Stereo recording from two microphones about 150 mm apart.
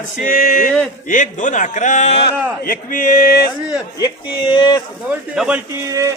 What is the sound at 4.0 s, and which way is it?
Speech, 30° left (ahead or behind).